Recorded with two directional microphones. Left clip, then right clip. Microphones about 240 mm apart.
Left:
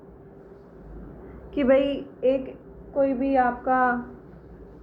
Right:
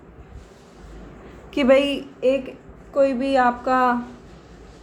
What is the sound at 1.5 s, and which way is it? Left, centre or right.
A woman's voice, right.